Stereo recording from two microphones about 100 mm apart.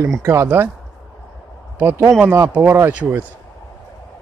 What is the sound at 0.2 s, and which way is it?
Speech, 30° right (ahead or behind).